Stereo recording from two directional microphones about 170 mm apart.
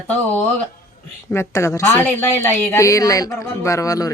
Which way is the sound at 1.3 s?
15° left (ahead or behind).